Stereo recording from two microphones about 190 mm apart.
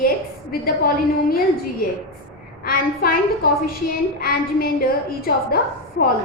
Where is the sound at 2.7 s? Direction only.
50° left (ahead or behind).